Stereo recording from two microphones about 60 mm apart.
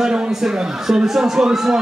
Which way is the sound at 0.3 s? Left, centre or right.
Centre.